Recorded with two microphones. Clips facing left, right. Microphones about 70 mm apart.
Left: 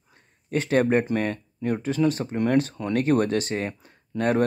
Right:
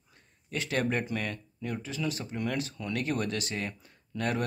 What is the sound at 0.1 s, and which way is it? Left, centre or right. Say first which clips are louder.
Speech: left 10 dB; left.